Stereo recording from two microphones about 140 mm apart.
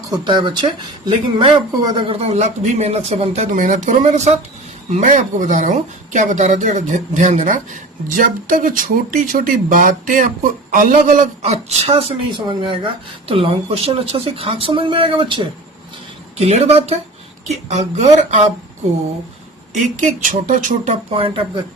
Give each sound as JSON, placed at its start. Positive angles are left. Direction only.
{"t": 0.1, "sound": "speech", "side_deg": -35}
{"t": 16.4, "sound": "speech", "side_deg": -50}
{"t": 19.7, "sound": "speech", "side_deg": -65}
{"t": 20.9, "sound": "speech", "side_deg": -40}